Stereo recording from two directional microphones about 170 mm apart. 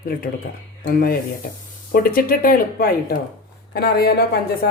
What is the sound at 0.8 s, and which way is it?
A woman's voice, 60° left (ahead or behind).